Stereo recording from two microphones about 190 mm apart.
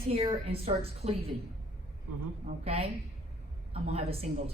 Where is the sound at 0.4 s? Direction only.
30° right (ahead or behind).